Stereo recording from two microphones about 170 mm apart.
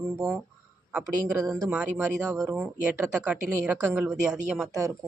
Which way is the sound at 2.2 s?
20° right (ahead or behind).